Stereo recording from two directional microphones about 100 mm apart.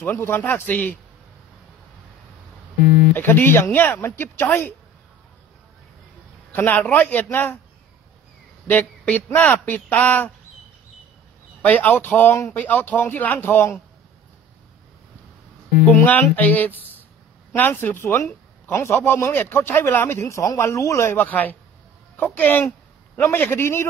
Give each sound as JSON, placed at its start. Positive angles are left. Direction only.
{"t": 0.0, "sound": "speech", "side_deg": 20}
{"t": 3.2, "sound": "a man's voice", "side_deg": 20}
{"t": 6.5, "sound": "a man's voice", "side_deg": 20}
{"t": 8.6, "sound": "speech", "side_deg": 15}
{"t": 11.6, "sound": "speech", "side_deg": 15}
{"t": 15.8, "sound": "a man's voice", "side_deg": 15}